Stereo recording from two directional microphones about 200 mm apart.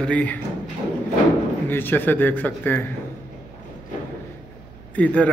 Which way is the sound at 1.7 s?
10° left (ahead or behind).